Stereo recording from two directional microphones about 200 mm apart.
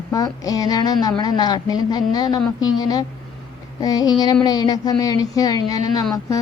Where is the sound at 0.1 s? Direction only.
15° left (ahead or behind).